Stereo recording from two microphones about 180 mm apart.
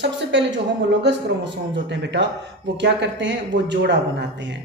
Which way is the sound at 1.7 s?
75° right (ahead or behind).